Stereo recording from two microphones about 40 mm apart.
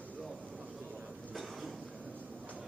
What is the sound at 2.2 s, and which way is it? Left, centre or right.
Vehicle, right.